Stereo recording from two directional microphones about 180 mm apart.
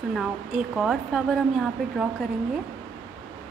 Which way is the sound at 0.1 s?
5° right (ahead or behind).